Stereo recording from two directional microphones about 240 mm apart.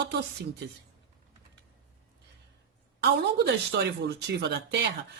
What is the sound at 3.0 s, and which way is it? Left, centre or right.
Speech, right.